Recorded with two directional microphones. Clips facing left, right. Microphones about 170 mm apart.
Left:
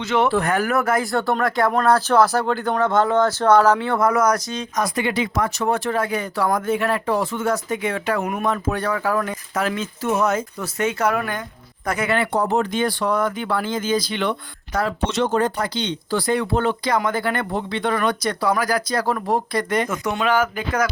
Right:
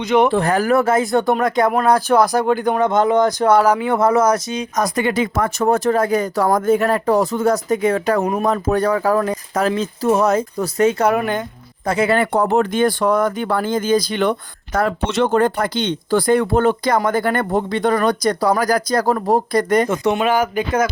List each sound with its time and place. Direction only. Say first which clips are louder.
0.0 s speech: right 5 dB; 15° right (ahead or behind)
0.3 s speech: right 4 dB; 35° right (ahead or behind); by 3.9 s 10° right (ahead or behind)
3.9 s speech: right 3 dB; 25° right (ahead or behind)
4.8 s speech: right 4 dB; 45° right (ahead or behind)
11.1 s speech: right 5 dB; 20° right (ahead or behind)
11.9 s speech: right 5 dB; 30° right (ahead or behind)
12.2 s speech: right 4 dB; 55° right (ahead or behind); by 19.9 s 40° right (ahead or behind)
19.9 s speech: right 4 dB; 25° right (ahead or behind)